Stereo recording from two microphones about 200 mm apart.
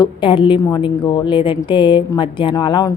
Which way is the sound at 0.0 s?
25° left (ahead or behind).